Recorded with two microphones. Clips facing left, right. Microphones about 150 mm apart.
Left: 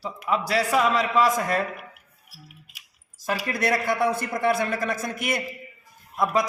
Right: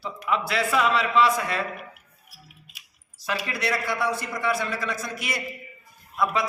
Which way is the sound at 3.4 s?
50° left (ahead or behind).